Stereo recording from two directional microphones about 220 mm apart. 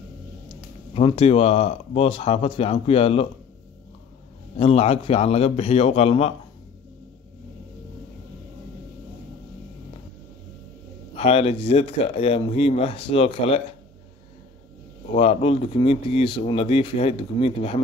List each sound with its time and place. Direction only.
0.9 s speech: 25° left (ahead or behind)
4.6 s speech: 25° left (ahead or behind)
11.1 s speech: 25° left (ahead or behind)
15.1 s speech: 25° left (ahead or behind)